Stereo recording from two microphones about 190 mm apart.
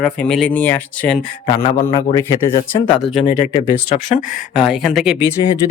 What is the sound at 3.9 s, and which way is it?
Speech, 35° left (ahead or behind).